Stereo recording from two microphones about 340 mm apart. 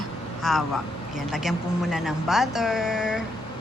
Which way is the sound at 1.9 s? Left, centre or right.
Centre.